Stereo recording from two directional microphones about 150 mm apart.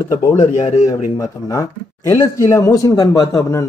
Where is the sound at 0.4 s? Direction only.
50° left (ahead or behind).